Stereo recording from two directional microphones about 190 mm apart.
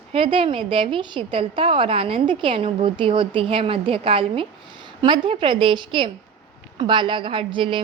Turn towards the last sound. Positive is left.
turn(degrees=-25)  # may be behind; listen again after turning